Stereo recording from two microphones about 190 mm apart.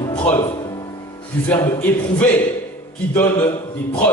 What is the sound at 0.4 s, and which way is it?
Music, 20° left (ahead or behind).